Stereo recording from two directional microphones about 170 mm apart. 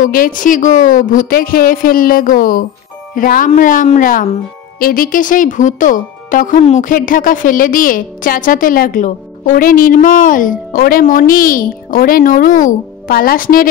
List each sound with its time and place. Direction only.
0.0 s a woman's voice: 55° left (ahead or behind)